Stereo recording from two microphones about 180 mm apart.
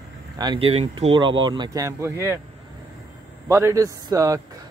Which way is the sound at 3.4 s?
15° right (ahead or behind).